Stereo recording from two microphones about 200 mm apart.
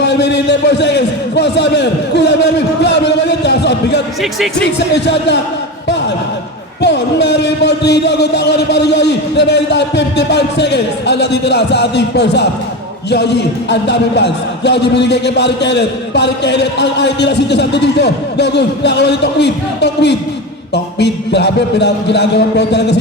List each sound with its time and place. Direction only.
0.0 s a sound: 60° left (ahead or behind)
4.6 s a man's voice: 60° left (ahead or behind)
6.8 s a man's voice: 60° left (ahead or behind)